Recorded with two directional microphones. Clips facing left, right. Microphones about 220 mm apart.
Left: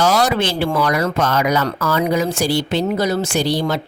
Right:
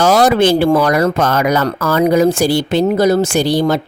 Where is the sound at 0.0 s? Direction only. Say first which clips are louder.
Right 6 dB; 50° right (ahead or behind).